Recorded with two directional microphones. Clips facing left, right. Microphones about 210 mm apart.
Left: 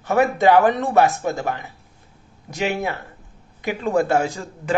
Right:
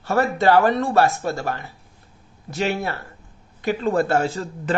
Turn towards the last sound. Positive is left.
turn(degrees=15)  # may be behind; listen again after turning